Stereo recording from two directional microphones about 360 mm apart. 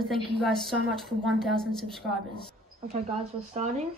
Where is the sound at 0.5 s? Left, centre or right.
Centre.